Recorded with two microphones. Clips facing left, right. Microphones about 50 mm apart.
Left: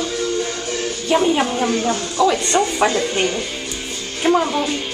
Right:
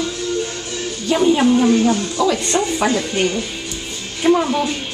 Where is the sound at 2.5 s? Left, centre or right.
Left.